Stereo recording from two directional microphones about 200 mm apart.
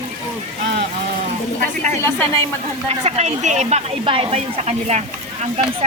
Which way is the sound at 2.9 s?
35° right (ahead or behind).